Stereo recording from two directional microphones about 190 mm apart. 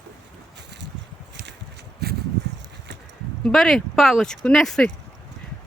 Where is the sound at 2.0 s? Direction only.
60° right (ahead or behind).